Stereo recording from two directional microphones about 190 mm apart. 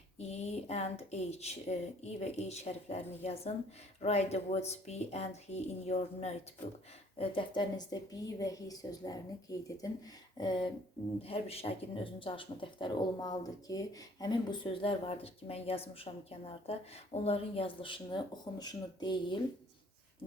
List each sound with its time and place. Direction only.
0.2 s speech: 35° left (ahead or behind)